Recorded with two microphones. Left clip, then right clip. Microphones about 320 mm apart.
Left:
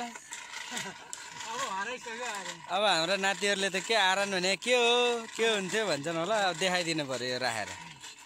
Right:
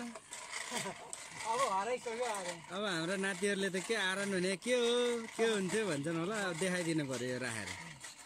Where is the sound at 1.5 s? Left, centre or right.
Centre.